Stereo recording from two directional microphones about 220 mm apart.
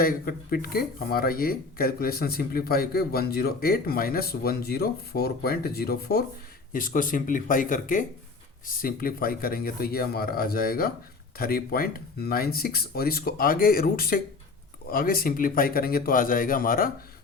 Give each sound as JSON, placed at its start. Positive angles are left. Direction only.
{"t": 0.0, "sound": "speech", "side_deg": 40}